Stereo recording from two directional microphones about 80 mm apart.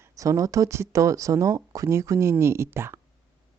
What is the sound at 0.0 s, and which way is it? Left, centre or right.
Speech, right.